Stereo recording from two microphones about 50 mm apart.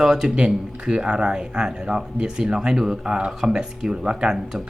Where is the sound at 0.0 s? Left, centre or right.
Centre.